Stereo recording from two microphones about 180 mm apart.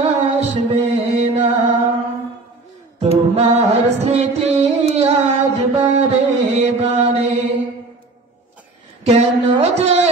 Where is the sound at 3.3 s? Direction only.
35° right (ahead or behind).